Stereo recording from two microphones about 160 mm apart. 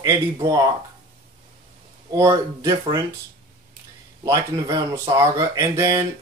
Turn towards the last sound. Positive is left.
turn(degrees=-20)  # may be behind; listen again after turning